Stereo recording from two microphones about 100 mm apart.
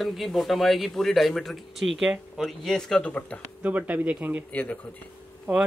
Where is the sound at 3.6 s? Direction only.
15° right (ahead or behind).